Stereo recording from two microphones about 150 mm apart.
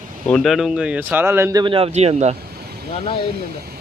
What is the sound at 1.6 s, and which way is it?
Speech, 35° right (ahead or behind).